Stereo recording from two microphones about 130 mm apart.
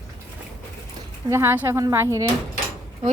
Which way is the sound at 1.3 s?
20° right (ahead or behind).